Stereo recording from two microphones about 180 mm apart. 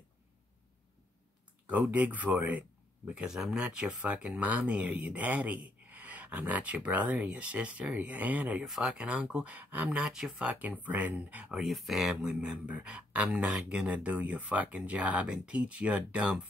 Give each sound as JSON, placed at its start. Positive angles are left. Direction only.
{"t": 1.7, "sound": "speech", "side_deg": -10}